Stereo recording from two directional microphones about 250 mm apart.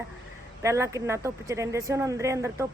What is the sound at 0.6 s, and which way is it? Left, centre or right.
Speech, centre.